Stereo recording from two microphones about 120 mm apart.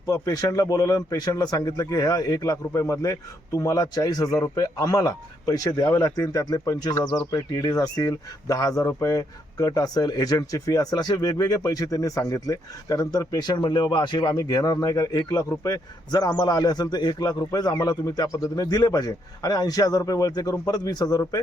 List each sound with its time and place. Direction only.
0.0 s a man's voice: 30° left (ahead or behind)